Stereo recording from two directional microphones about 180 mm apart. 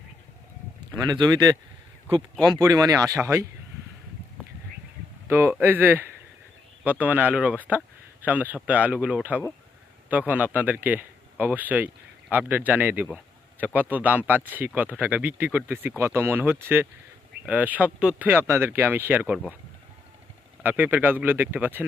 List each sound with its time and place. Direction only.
1.1 s speech: 20° right (ahead or behind)
5.3 s speech: 10° right (ahead or behind)
20.6 s speech: 10° right (ahead or behind)